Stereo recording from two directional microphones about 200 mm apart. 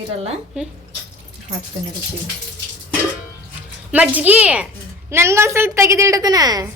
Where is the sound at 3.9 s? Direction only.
5° right (ahead or behind).